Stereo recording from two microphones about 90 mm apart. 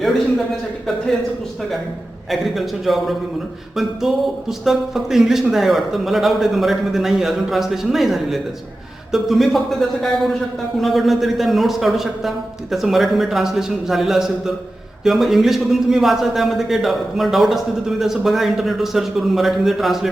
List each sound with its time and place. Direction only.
0.0 s a man's voice: centre (ahead or behind)
2.3 s a man's voice: centre (ahead or behind)